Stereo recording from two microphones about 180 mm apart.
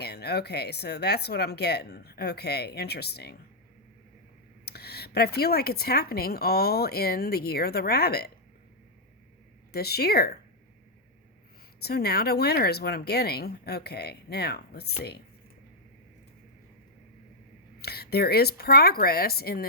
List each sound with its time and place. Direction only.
0.0 s speech: 65° left (ahead or behind)
4.6 s speech: 65° left (ahead or behind)
9.7 s speech: 60° left (ahead or behind)
11.8 s speech: 60° left (ahead or behind)
17.7 s speech: 60° left (ahead or behind)